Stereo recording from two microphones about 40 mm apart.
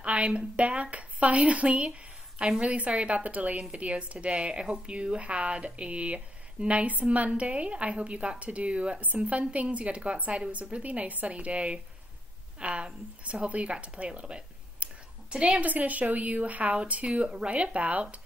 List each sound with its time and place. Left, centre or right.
0.0 s a woman's voice: right
15.6 s speech: right